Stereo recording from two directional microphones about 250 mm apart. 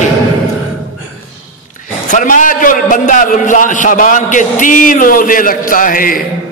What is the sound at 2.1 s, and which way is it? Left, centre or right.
A man's voice, left.